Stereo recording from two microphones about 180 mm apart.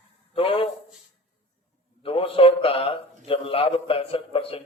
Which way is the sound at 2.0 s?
30° left (ahead or behind).